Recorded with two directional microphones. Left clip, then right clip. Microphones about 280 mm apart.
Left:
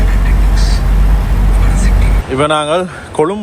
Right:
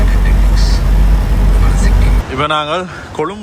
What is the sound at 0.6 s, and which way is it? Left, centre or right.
Vehicle, centre.